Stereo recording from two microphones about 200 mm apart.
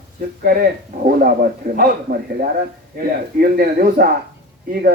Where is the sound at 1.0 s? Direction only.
45° right (ahead or behind).